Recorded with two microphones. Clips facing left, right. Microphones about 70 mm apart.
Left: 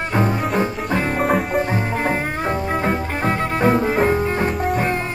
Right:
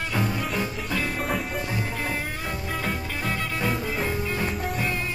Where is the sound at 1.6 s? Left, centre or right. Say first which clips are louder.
Left 9 dB; left.